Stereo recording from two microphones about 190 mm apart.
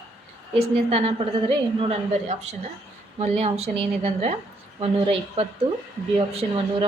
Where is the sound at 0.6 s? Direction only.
30° right (ahead or behind).